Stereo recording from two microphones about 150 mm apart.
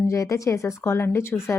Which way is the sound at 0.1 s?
20° left (ahead or behind).